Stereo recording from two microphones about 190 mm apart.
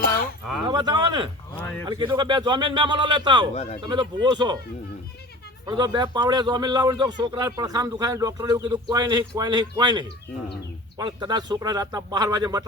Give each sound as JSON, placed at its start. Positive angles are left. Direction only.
{"t": 0.7, "sound": "a man's voice", "side_deg": -20}
{"t": 3.5, "sound": "speech", "side_deg": 35}
{"t": 3.8, "sound": "a man's voice", "side_deg": -25}
{"t": 5.6, "sound": "a man's voice", "side_deg": -20}